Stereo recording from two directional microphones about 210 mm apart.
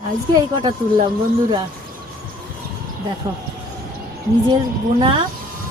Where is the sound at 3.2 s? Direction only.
20° right (ahead or behind).